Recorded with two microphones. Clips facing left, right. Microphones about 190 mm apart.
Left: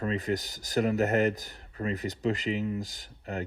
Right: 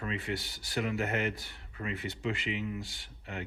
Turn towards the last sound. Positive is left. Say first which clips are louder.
# left 6 dB
turn(degrees=40)  # may be behind; listen again after turning